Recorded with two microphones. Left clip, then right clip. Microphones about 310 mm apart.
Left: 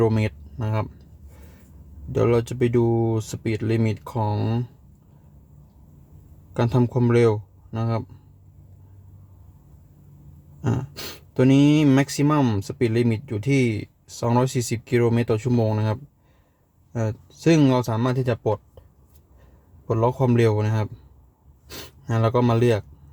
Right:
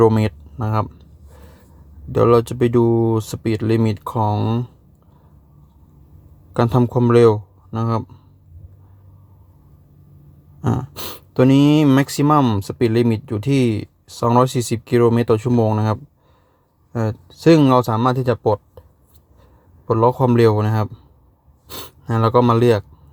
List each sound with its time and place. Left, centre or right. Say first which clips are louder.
0.0 s speech: right 7 dB; centre
2.1 s speech: right 7 dB; centre
6.5 s speech: right 5 dB; centre
10.7 s speech: right 5 dB; centre
19.9 s speech: right 6 dB; centre